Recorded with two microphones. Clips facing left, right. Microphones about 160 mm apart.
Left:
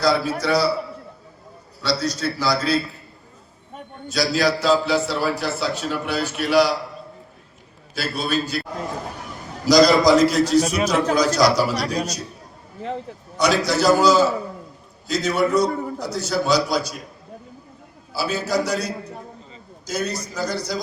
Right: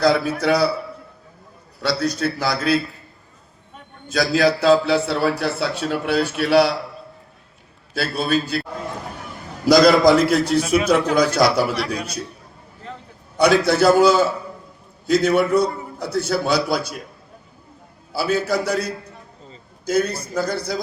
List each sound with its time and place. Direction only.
0.0 s a man's voice: 55° right (ahead or behind)
1.8 s a man's voice: 55° right (ahead or behind)
4.1 s a man's voice: 50° right (ahead or behind)
7.9 s a man's voice: 55° right (ahead or behind)
9.6 s a man's voice: 55° right (ahead or behind)
13.3 s a man's voice: 55° right (ahead or behind)
18.1 s a man's voice: 55° right (ahead or behind)